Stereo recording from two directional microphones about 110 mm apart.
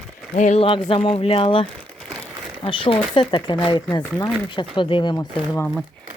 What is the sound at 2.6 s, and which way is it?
Speech, 50° left (ahead or behind).